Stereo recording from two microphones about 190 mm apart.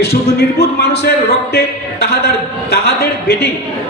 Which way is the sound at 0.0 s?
55° left (ahead or behind).